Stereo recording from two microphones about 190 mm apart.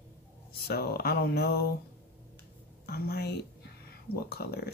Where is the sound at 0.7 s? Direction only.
55° left (ahead or behind).